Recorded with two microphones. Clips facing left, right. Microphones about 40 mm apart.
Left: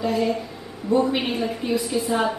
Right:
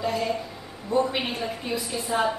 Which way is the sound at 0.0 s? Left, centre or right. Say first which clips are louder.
Left 4 dB; centre.